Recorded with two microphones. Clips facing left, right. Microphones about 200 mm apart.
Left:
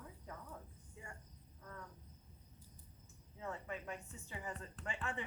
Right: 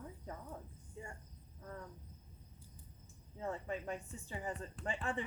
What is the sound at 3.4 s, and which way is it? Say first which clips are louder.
Speech: right 5 dB; 30° right (ahead or behind).